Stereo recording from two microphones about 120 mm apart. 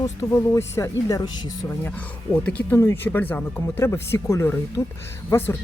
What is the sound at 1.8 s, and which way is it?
Speech, 15° left (ahead or behind).